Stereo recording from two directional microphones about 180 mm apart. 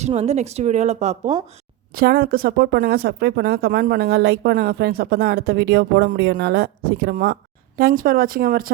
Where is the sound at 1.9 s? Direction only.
55° right (ahead or behind).